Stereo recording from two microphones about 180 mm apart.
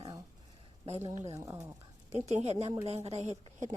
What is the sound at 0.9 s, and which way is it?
Speech, 35° right (ahead or behind).